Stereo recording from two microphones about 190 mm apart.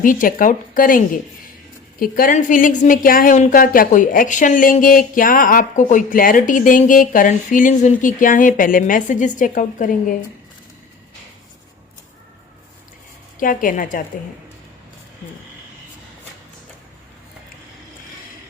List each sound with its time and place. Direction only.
0.0 s a woman's voice: 45° left (ahead or behind)
13.4 s a woman's voice: 45° left (ahead or behind)